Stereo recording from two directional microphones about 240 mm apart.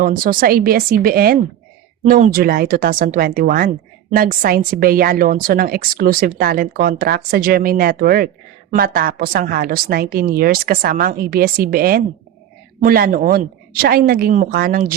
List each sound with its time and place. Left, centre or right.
0.0 s a woman's voice: right